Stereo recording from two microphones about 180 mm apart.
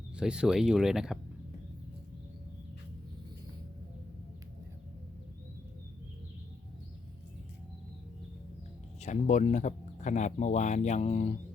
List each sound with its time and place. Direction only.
0.2 s speech: 5° right (ahead or behind)
9.0 s speech: 40° left (ahead or behind)